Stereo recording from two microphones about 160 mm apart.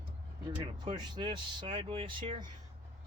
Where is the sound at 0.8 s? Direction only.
30° right (ahead or behind).